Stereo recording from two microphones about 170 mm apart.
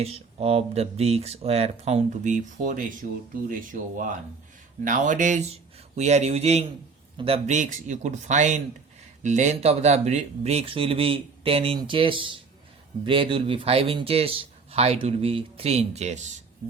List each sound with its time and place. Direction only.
0.0 s speech: 35° right (ahead or behind)